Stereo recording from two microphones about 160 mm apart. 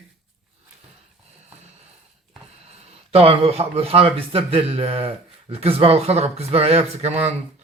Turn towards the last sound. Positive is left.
turn(degrees=-40)  # may be behind; listen again after turning